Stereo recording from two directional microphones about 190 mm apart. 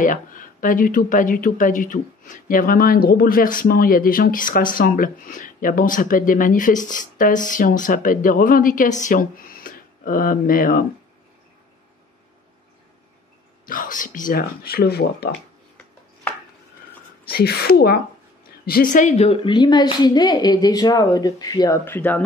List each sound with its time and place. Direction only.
0.0 s speech: 45° left (ahead or behind)
13.7 s speech: 45° left (ahead or behind)
17.3 s a woman's voice: 55° left (ahead or behind); by 22.2 s 10° left (ahead or behind)